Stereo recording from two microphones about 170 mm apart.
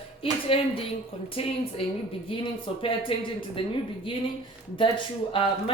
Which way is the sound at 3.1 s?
30° left (ahead or behind).